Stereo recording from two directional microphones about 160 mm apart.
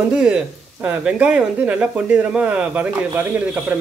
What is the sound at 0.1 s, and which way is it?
Speech, 5° right (ahead or behind).